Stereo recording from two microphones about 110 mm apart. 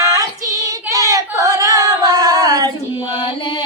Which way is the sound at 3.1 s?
50° left (ahead or behind).